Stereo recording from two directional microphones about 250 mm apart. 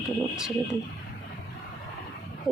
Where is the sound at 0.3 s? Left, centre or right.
Centre.